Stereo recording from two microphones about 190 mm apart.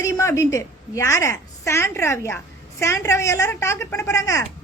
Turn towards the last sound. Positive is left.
turn(degrees=15)  # may be behind; listen again after turning